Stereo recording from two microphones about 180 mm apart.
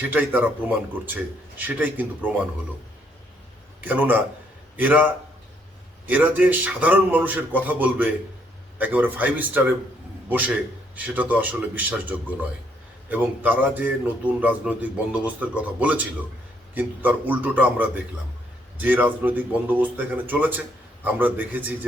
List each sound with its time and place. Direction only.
0.0 s a man's voice: 10° right (ahead or behind)
3.8 s a man's voice: 10° right (ahead or behind)